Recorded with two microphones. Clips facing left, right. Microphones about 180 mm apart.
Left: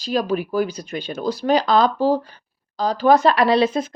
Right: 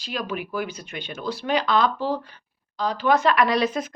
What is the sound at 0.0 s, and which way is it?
Speech, 35° left (ahead or behind).